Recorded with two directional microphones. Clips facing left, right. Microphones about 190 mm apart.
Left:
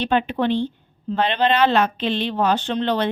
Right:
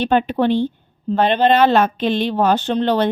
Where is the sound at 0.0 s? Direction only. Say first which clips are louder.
Right 4 dB; 45° right (ahead or behind).